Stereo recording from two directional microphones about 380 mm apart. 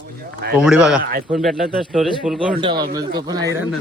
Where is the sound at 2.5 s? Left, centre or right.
Centre.